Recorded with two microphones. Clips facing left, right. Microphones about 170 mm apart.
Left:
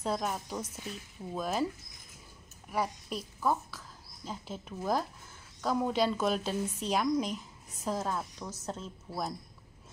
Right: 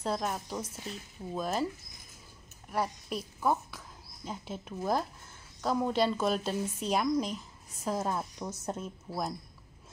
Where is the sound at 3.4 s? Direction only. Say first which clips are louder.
Right 1 dB; 15° right (ahead or behind).